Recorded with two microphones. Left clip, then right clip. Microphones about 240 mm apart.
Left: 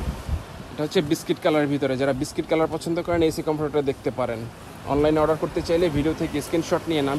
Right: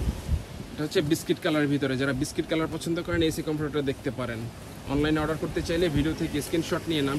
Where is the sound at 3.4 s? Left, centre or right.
Left.